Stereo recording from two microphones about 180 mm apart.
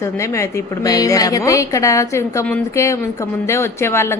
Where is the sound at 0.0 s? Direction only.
15° left (ahead or behind).